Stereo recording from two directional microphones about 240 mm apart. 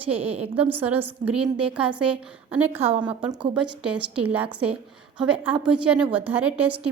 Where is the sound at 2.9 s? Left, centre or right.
Right.